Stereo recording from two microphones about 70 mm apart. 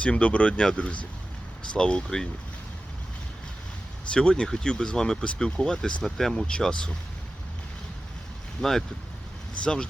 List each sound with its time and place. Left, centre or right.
0.0 s speech: centre
4.1 s speech: centre
8.6 s speech: centre